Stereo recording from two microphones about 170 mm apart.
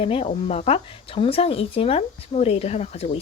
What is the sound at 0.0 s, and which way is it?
A woman's voice, 35° left (ahead or behind).